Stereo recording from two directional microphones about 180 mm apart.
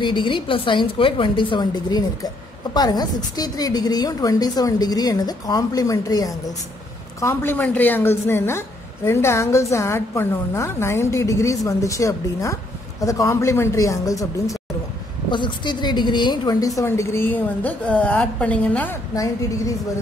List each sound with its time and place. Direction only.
0.0 s a woman's voice: 25° left (ahead or behind); by 18.9 s 10° left (ahead or behind)